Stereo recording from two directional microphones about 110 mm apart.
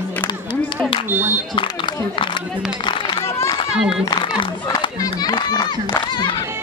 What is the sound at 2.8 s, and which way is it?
Run, 45° left (ahead or behind).